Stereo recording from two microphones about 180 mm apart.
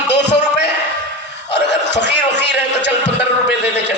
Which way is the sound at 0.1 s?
70° left (ahead or behind).